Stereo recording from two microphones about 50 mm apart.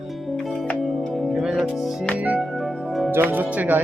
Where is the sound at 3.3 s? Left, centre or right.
Right.